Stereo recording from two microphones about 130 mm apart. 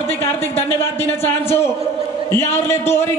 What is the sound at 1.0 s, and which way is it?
A man's voice, 20° left (ahead or behind).